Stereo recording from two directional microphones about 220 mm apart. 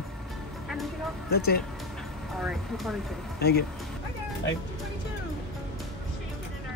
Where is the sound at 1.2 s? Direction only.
45° left (ahead or behind).